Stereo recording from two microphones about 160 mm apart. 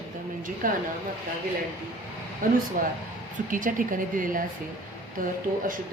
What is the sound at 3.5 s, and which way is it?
A woman's voice, 55° right (ahead or behind).